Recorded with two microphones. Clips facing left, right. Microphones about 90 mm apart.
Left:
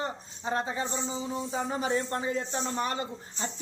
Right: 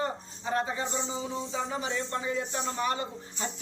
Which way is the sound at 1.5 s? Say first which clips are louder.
Left 4 dB; 35° left (ahead or behind).